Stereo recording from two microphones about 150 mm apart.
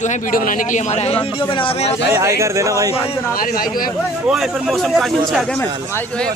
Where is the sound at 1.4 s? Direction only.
35° left (ahead or behind).